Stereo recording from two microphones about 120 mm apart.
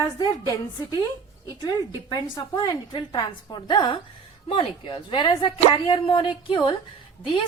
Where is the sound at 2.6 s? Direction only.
35° left (ahead or behind).